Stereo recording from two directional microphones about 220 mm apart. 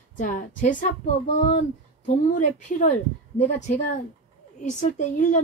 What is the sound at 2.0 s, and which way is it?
Speech, 35° left (ahead or behind).